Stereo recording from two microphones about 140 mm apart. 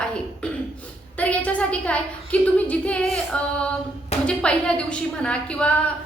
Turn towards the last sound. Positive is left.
turn(degrees=5)  # may be behind; listen again after turning